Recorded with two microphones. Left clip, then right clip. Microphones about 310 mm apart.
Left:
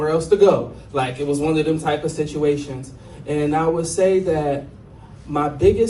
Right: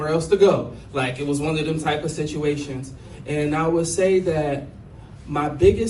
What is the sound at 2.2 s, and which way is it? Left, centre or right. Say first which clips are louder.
Speech: left 4 dB; left.